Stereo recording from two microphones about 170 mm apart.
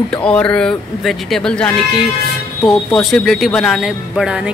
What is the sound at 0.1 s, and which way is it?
Speech, 5° left (ahead or behind).